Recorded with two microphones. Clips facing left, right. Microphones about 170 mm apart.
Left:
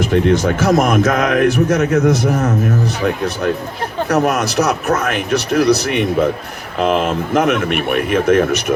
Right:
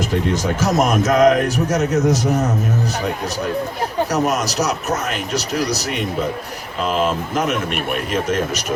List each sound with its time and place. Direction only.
0.4 s speech: 60° left (ahead or behind)
4.1 s speech: 60° left (ahead or behind)